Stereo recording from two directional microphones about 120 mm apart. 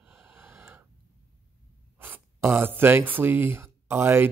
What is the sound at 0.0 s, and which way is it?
Breathing, 15° right (ahead or behind).